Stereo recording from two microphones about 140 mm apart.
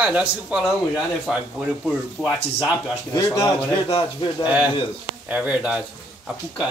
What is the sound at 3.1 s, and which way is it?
Speech, 25° left (ahead or behind).